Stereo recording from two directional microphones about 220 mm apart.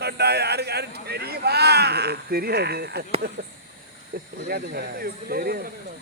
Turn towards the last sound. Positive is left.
turn(degrees=-45)  # may be behind; listen again after turning